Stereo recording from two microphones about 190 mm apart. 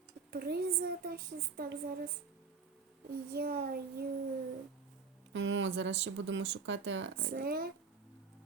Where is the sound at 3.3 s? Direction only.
55° right (ahead or behind).